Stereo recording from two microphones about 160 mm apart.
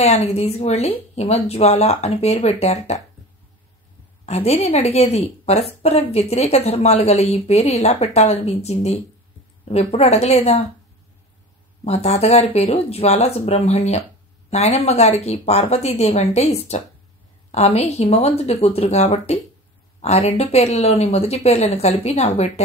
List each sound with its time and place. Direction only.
0.0 s speech: 40° left (ahead or behind)
4.3 s a woman's voice: 40° left (ahead or behind)
11.8 s a woman's voice: 45° left (ahead or behind)